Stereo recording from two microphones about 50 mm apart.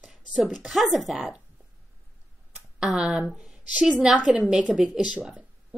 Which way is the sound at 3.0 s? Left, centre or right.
Centre.